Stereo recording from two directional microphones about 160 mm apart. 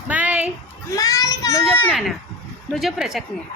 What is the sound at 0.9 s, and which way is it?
Speech, 20° left (ahead or behind).